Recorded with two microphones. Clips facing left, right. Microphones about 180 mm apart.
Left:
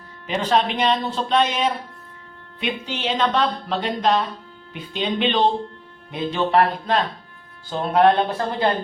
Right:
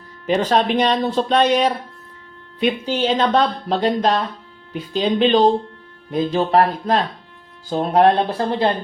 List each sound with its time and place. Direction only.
0.3 s speech: 40° right (ahead or behind)